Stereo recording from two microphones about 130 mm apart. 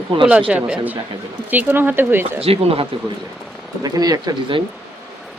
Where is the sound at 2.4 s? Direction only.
50° right (ahead or behind).